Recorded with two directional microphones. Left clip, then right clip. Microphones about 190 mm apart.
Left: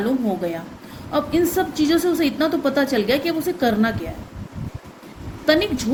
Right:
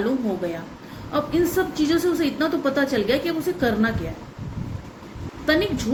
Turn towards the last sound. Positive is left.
turn(degrees=50)  # may be behind; listen again after turning